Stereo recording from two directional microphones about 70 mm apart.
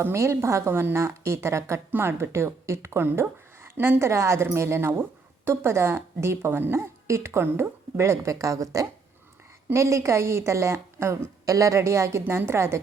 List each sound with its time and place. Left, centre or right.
0.0 s a woman's voice: right